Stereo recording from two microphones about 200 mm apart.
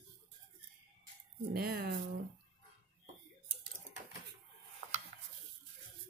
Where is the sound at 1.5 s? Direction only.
50° right (ahead or behind).